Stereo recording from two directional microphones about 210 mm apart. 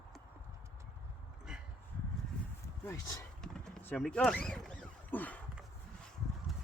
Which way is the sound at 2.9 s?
15° left (ahead or behind).